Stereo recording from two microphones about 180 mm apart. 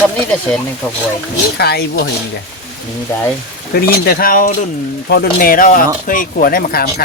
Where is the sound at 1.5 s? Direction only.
65° left (ahead or behind).